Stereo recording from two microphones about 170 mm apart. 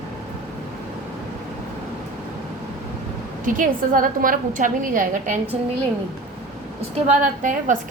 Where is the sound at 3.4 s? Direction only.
50° right (ahead or behind).